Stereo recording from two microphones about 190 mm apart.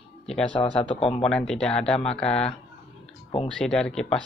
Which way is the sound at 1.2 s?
5° left (ahead or behind).